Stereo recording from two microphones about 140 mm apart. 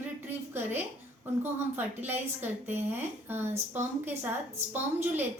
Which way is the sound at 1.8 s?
15° right (ahead or behind).